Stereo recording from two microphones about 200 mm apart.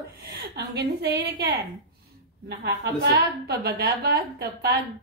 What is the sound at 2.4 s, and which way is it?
A woman's voice, 55° right (ahead or behind).